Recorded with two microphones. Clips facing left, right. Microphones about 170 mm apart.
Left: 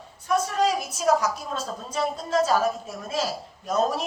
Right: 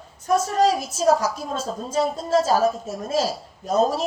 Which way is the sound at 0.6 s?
30° right (ahead or behind).